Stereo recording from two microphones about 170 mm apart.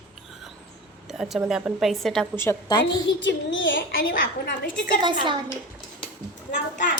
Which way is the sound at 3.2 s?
90° left.